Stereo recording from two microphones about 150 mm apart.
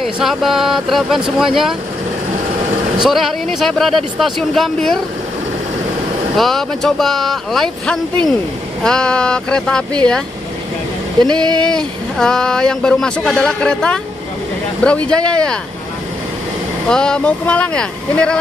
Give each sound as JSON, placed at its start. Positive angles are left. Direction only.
{"t": 0.0, "sound": "speech", "side_deg": 0}
{"t": 3.0, "sound": "speech", "side_deg": 0}
{"t": 6.3, "sound": "speech", "side_deg": 0}
{"t": 11.5, "sound": "speech", "side_deg": 5}
{"t": 16.9, "sound": "speech", "side_deg": 5}